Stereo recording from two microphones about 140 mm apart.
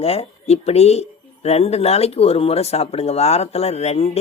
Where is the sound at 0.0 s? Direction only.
45° left (ahead or behind).